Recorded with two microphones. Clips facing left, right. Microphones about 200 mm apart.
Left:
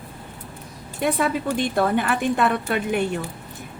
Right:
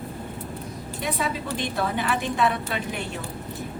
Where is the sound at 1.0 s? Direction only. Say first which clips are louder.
Left 7 dB; 55° left (ahead or behind).